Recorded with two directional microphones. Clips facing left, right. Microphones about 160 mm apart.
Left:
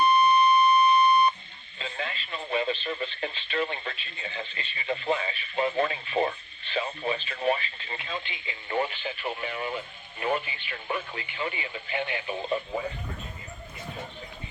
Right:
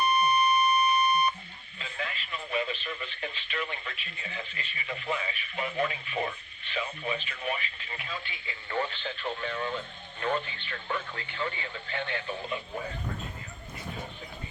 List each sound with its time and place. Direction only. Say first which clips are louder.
0.0 s alarm clock: left 4 dB; 25° left (ahead or behind)
1.8 s speech: left 3 dB; 30° left (ahead or behind); by 12.4 s 15° left (ahead or behind)